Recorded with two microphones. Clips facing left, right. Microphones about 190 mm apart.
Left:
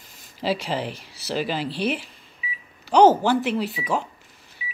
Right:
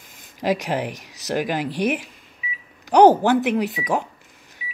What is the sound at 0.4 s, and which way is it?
Speech, 15° right (ahead or behind).